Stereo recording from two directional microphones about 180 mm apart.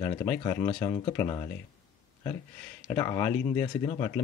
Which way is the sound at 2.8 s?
20° left (ahead or behind).